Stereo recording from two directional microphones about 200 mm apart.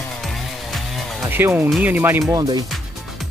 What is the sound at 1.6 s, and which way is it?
Speech, 10° right (ahead or behind).